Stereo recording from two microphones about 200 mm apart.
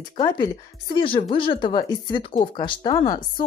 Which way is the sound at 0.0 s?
20° left (ahead or behind).